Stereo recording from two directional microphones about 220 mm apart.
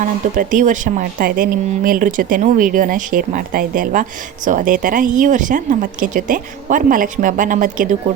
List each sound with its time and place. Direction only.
0.0 s a woman's voice: 35° right (ahead or behind)